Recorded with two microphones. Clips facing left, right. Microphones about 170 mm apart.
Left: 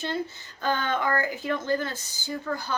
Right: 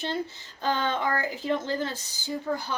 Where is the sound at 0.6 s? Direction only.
25° right (ahead or behind).